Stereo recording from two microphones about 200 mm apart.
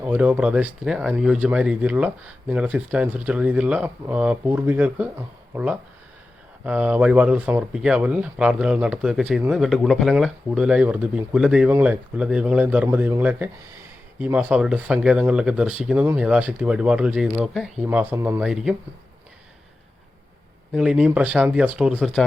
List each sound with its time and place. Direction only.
0.0 s speech: 5° right (ahead or behind)
20.7 s speech: 5° right (ahead or behind)